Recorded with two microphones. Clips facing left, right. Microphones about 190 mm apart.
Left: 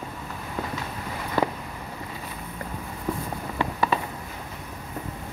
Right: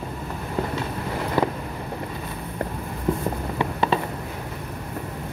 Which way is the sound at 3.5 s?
25° right (ahead or behind).